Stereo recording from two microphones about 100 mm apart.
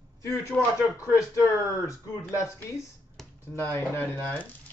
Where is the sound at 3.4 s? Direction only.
25° left (ahead or behind).